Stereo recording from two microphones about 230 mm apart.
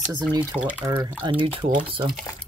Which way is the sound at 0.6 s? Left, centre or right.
Centre.